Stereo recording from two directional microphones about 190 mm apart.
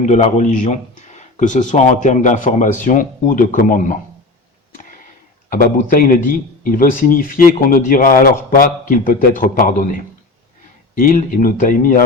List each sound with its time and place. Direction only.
0.1 s a man's voice: 40° left (ahead or behind)
5.5 s a man's voice: 50° left (ahead or behind)